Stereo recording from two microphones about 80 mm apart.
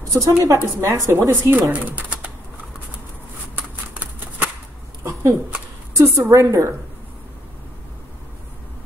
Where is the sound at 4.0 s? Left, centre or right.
Right.